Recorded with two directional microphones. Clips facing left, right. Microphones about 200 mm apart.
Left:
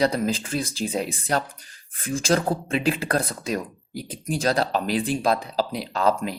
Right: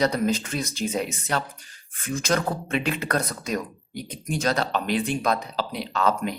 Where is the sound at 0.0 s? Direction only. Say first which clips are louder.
Even; 30° left (ahead or behind).